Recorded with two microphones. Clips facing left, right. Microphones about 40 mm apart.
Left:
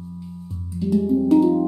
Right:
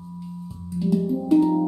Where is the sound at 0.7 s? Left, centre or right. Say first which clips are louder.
Left 3 dB; centre.